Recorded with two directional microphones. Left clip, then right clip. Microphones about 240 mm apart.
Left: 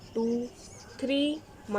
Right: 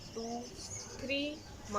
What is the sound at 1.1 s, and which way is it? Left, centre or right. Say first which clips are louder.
Speech: left 8 dB; left.